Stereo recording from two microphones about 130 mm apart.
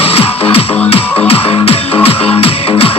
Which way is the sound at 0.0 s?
45° left (ahead or behind).